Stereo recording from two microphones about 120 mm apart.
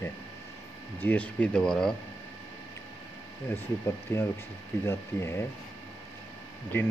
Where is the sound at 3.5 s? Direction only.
20° left (ahead or behind).